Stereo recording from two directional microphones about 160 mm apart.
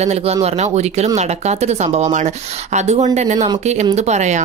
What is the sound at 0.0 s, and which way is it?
Speech, 40° right (ahead or behind).